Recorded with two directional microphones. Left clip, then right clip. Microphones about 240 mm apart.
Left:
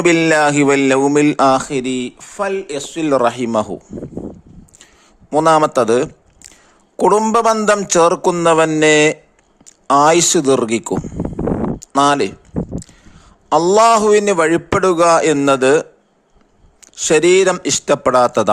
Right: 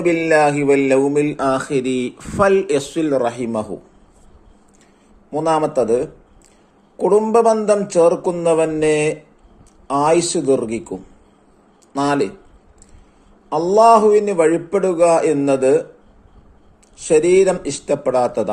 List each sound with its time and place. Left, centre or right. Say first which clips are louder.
0.0 s a man's voice: left 2 dB; left; by 2.2 s centre
2.3 s speech: right 6 dB; centre
3.1 s a man's voice: left 7 dB; left
5.3 s a man's voice: left 6 dB; left
13.5 s a man's voice: left 1 dB; left
16.9 s a man's voice: left 2 dB; left